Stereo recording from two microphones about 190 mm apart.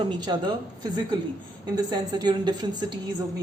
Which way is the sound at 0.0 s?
25° right (ahead or behind).